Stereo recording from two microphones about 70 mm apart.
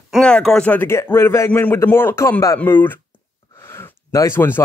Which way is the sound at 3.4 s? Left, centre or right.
Left.